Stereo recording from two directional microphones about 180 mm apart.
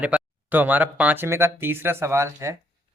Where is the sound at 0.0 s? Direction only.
10° right (ahead or behind).